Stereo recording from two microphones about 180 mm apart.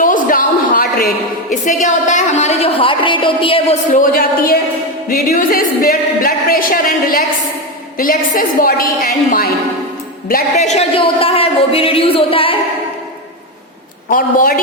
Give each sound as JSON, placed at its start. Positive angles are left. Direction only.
{"t": 0.0, "sound": "a woman's voice", "side_deg": 50}
{"t": 3.9, "sound": "a woman's voice", "side_deg": 50}
{"t": 14.1, "sound": "a woman's voice", "side_deg": 50}